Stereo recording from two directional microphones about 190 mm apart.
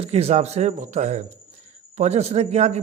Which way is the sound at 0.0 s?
35° right (ahead or behind).